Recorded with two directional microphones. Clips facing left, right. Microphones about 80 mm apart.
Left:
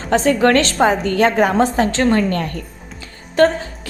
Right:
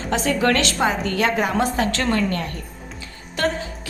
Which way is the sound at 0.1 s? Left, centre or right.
Left.